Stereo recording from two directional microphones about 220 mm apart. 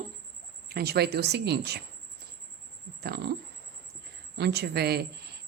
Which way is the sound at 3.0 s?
45° right (ahead or behind).